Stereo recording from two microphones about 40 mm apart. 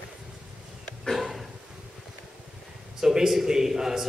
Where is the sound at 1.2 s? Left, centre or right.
Centre.